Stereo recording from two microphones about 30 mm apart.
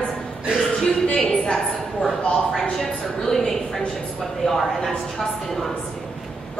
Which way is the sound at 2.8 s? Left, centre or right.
Centre.